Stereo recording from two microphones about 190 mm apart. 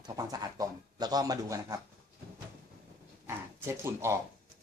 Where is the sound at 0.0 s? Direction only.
20° right (ahead or behind).